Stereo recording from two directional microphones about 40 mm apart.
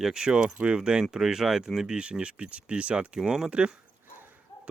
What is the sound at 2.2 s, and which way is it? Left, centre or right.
Speech, right.